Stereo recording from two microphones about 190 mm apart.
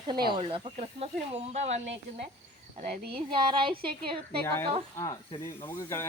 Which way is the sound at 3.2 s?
25° right (ahead or behind).